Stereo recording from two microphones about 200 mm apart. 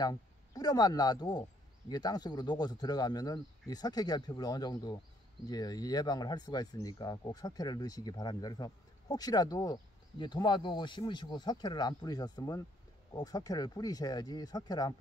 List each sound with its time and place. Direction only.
0.0 s speech: 20° left (ahead or behind)